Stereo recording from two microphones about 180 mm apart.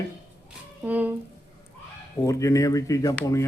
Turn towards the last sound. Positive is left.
turn(degrees=20)  # may be behind; listen again after turning